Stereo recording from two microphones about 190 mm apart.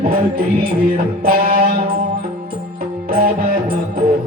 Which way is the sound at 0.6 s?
50° right (ahead or behind).